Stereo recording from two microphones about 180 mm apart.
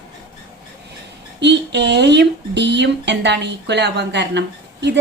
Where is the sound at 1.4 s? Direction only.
75° right (ahead or behind).